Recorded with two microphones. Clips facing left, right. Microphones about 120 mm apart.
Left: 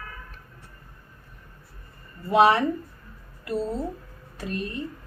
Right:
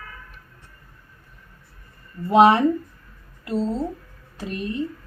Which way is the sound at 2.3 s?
20° right (ahead or behind).